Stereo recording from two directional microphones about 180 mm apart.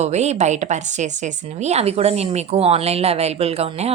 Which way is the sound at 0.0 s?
40° right (ahead or behind).